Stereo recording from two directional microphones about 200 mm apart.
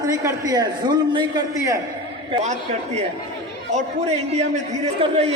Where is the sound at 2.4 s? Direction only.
35° right (ahead or behind).